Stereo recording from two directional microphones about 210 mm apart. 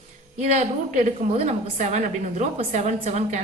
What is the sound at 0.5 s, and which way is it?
A woman's voice, 35° right (ahead or behind).